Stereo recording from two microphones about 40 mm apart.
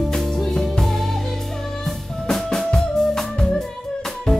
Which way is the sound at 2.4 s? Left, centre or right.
Centre.